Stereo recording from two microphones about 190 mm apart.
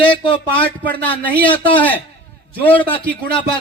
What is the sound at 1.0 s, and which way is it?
A man's voice, 10° left (ahead or behind).